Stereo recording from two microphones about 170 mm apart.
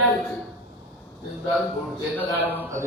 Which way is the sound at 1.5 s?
5° left (ahead or behind).